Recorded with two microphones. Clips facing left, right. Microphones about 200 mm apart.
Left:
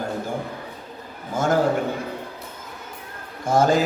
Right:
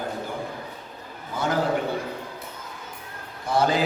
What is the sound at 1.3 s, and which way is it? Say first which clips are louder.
Speech: left 5 dB; 45° left (ahead or behind).